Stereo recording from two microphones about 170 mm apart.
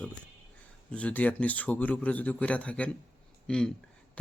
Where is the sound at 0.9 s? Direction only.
5° left (ahead or behind).